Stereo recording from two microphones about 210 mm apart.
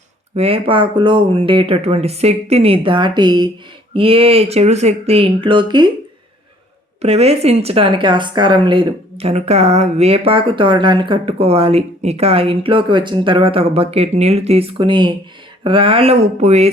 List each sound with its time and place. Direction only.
0.3 s speech: 25° right (ahead or behind)
7.0 s speech: 30° right (ahead or behind)